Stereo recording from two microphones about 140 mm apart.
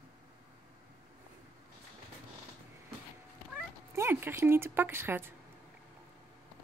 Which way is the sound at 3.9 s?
15° right (ahead or behind).